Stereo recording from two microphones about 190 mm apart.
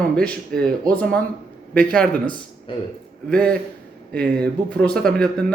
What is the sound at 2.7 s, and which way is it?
Speech, 25° left (ahead or behind).